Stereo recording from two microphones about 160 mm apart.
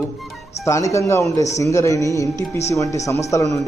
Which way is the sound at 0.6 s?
20° left (ahead or behind).